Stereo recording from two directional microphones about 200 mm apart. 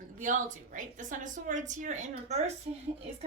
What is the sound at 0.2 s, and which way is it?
A woman's voice, 40° right (ahead or behind).